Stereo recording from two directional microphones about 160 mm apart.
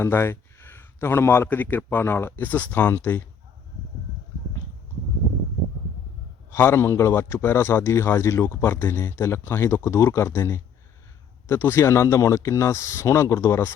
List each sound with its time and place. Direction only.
0.0 s a man's voice: 15° left (ahead or behind)
6.5 s a man's voice: 15° left (ahead or behind)